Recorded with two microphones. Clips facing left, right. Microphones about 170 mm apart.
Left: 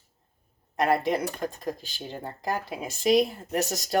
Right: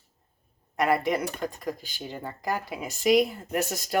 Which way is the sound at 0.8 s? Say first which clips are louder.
Even; 25° left (ahead or behind).